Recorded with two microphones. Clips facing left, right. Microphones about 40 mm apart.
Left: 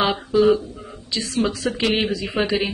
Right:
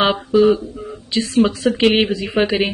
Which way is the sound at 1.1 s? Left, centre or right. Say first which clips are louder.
Right 6 dB; right.